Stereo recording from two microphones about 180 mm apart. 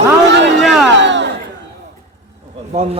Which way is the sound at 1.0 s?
80° right.